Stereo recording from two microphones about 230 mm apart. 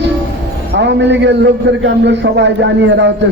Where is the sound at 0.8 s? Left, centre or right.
Right.